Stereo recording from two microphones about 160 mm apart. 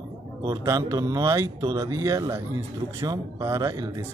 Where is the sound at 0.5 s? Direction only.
20° right (ahead or behind).